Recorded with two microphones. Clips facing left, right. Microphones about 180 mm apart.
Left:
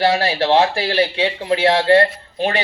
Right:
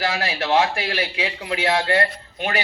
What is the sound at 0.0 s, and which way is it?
Speech, 30° left (ahead or behind).